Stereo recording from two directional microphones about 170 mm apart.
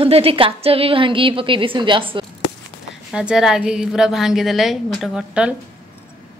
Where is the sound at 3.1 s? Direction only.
5° right (ahead or behind).